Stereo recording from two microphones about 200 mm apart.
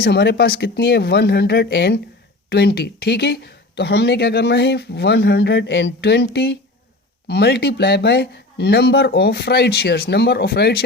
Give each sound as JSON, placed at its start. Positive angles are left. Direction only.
{"t": 0.0, "sound": "speech", "side_deg": 55}